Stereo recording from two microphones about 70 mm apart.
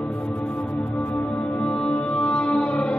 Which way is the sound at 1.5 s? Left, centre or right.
Centre.